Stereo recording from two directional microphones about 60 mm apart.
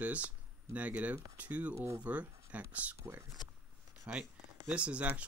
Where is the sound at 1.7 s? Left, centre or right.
Right.